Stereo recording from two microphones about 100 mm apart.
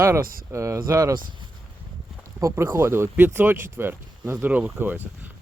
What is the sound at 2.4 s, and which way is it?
Speech, 30° right (ahead or behind).